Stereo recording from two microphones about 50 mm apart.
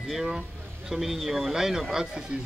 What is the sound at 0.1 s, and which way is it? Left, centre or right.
Speech, centre.